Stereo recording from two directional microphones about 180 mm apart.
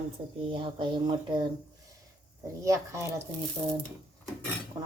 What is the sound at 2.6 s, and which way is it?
Speech, 15° right (ahead or behind).